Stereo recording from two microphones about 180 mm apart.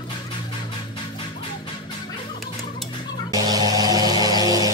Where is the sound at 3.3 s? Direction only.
20° right (ahead or behind).